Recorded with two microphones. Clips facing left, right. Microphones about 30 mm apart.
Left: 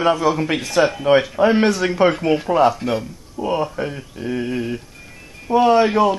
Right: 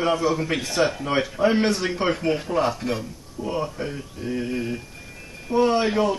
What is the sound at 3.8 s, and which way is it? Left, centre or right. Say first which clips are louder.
Speech: left 4 dB; left.